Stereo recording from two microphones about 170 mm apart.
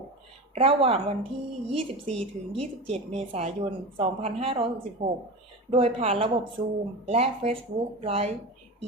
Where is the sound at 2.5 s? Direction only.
35° right (ahead or behind).